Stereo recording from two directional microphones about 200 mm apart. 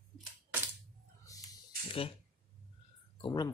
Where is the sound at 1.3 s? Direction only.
15° left (ahead or behind).